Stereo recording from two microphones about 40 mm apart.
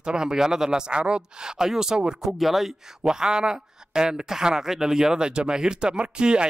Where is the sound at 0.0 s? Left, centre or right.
Centre.